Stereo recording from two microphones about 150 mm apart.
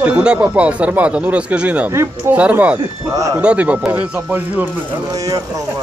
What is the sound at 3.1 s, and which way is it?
Speech, 20° right (ahead or behind).